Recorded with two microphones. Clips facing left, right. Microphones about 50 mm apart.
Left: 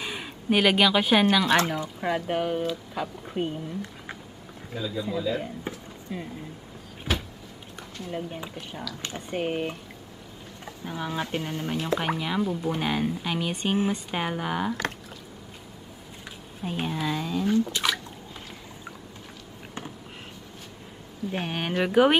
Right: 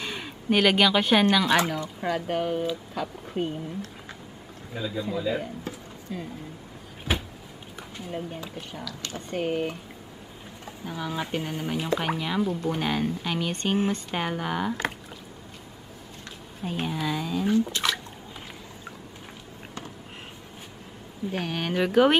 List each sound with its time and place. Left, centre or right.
0.0 s speech: centre
1.8 s speech: centre
4.7 s a man's voice: centre
5.6 s a sound: left
9.0 s speech: left
9.4 s speech: centre
10.9 s speech: centre
11.3 s speech: centre
16.6 s speech: centre
21.3 s speech: centre